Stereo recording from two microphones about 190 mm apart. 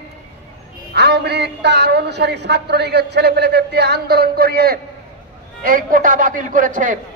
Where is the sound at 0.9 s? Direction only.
60° right (ahead or behind).